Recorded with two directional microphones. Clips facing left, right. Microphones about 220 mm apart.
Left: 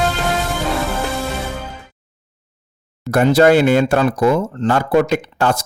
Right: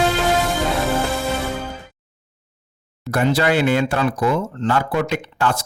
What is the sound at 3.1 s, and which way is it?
Speech, 45° left (ahead or behind).